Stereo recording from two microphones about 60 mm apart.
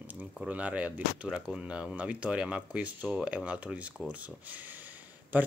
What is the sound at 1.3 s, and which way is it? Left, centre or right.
Speech, centre.